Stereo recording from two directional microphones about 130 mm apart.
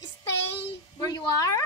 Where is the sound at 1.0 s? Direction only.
25° left (ahead or behind).